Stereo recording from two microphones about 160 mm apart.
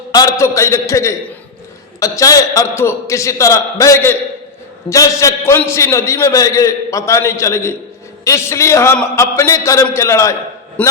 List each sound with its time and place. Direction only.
0.1 s a man's voice: 20° left (ahead or behind)